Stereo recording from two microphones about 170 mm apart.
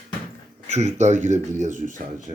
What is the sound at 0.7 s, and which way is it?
Speech, 40° right (ahead or behind).